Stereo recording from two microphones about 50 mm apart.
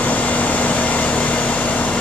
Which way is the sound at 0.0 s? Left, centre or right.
Left.